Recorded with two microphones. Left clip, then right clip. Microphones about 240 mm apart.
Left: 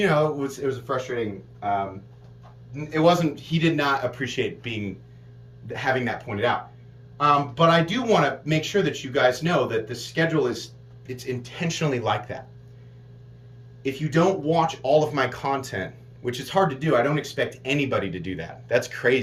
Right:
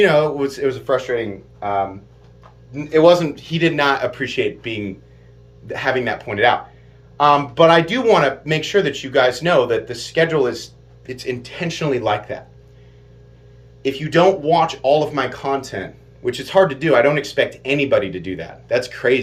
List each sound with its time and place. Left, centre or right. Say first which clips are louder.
0.0 s speech: right 7 dB; centre
3.0 s speech: right 7 dB; right; by 6.5 s centre
7.3 s speech: right 7 dB; centre
13.8 s speech: right 8 dB; centre